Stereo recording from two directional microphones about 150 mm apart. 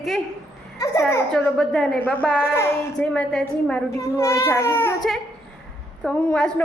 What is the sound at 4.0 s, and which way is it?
Speech, 20° left (ahead or behind).